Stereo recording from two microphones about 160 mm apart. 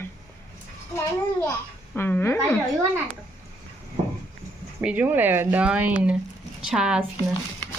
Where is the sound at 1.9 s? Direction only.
15° left (ahead or behind).